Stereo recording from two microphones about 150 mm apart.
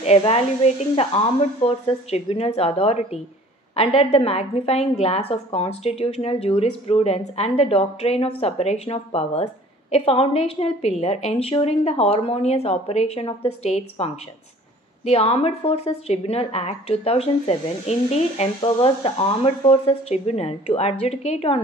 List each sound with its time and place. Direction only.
0.0 s a woman's voice: 45° left (ahead or behind)